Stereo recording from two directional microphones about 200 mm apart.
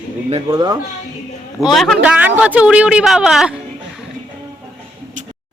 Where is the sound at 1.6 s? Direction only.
Centre (ahead or behind).